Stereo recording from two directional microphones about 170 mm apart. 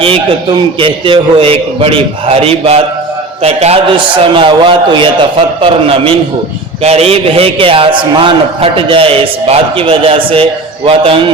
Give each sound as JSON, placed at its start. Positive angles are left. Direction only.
{"t": 0.8, "sound": "a man's voice", "side_deg": -30}